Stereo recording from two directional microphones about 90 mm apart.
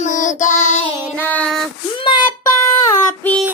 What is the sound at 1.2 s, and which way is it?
Child singing, 15° left (ahead or behind).